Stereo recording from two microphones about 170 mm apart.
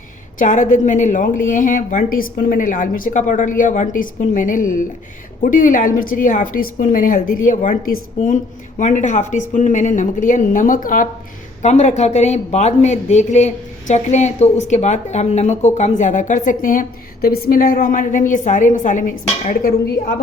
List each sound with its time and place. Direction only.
0.3 s speech: 45° left (ahead or behind)